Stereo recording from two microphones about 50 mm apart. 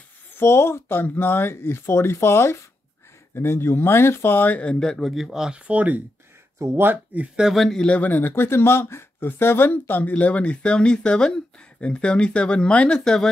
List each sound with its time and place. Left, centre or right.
0.3 s speech: left
4.7 s a man's voice: centre
5.0 s speech: centre
5.7 s speech: right
7.1 s speech: right
7.7 s speech: centre
8.0 s speech: left
9.7 s speech: left; by 13.3 s centre